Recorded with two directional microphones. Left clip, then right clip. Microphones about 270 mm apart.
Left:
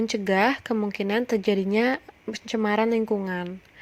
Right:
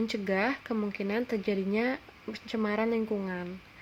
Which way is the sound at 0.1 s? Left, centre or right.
Left.